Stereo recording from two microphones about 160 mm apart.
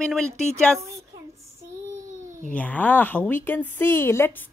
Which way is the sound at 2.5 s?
10° left (ahead or behind).